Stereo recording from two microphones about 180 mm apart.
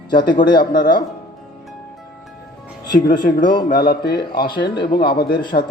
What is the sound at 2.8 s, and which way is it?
Speech, 25° left (ahead or behind).